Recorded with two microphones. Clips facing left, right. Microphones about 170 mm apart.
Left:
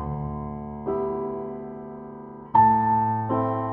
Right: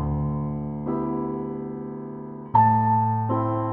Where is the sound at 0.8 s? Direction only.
Centre (ahead or behind).